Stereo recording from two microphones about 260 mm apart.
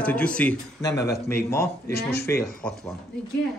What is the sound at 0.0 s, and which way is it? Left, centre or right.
A woman's voice, centre.